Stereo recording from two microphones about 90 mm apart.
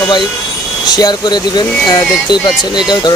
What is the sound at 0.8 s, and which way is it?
Speech, 50° left (ahead or behind).